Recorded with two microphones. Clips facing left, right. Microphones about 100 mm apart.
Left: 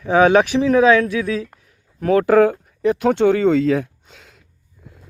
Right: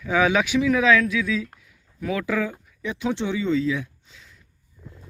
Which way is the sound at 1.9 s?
50° left (ahead or behind).